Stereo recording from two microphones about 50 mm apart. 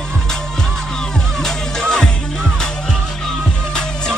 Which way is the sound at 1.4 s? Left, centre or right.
Centre.